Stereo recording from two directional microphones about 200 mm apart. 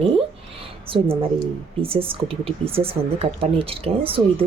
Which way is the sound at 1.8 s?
25° right (ahead or behind).